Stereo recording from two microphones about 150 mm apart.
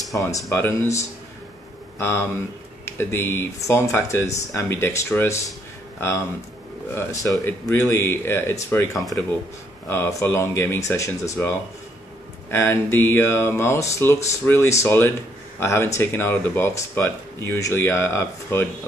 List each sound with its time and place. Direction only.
0.1 s speech: 20° left (ahead or behind)
9.8 s speech: 15° left (ahead or behind)